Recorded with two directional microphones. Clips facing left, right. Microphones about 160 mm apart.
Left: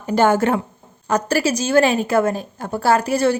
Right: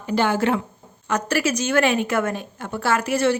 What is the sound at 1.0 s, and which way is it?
A woman's voice, 35° left (ahead or behind).